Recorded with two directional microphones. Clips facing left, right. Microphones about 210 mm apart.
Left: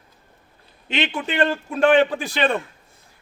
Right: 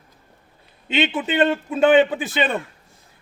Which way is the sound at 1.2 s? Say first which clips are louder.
Right 2 dB; 20° right (ahead or behind).